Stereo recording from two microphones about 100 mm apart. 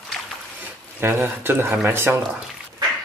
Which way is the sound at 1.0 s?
20° right (ahead or behind).